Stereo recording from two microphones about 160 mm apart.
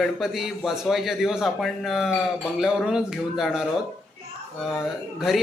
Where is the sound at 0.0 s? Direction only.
Centre (ahead or behind).